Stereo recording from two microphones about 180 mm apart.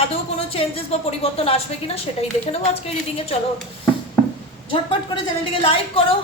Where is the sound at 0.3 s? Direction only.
35° left (ahead or behind).